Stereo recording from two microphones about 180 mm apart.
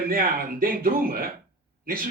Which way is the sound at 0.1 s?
55° right (ahead or behind).